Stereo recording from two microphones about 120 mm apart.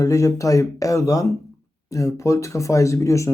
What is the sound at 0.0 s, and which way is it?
Speech, 25° left (ahead or behind).